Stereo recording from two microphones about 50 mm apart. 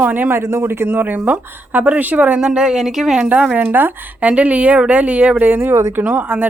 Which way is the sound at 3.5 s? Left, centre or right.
Right.